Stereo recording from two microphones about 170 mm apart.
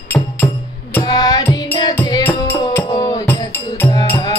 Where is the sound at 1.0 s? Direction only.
20° left (ahead or behind).